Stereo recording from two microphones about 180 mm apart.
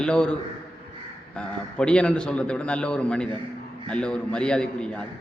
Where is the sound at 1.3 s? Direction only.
5° left (ahead or behind).